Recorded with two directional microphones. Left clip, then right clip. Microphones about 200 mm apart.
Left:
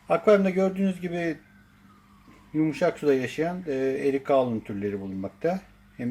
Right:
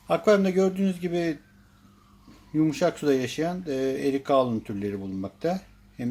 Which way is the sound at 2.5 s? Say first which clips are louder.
Right 1 dB; 10° right (ahead or behind).